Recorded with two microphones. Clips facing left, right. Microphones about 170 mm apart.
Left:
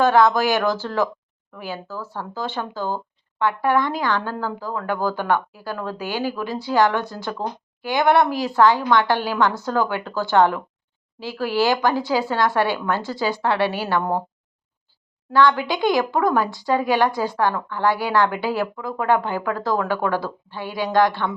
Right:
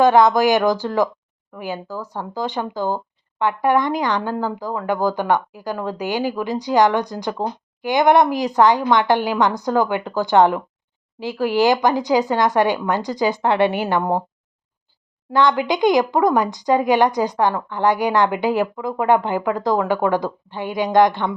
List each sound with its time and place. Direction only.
0.0 s speech: 15° right (ahead or behind)
15.3 s speech: 20° right (ahead or behind)